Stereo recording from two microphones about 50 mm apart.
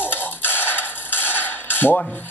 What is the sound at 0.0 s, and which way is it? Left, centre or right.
Mechanisms, left.